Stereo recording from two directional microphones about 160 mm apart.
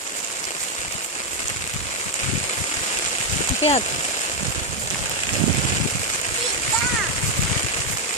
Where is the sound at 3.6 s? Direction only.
40° left (ahead or behind).